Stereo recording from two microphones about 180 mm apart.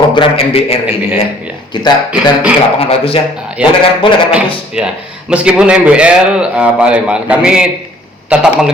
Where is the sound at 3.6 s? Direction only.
5° right (ahead or behind).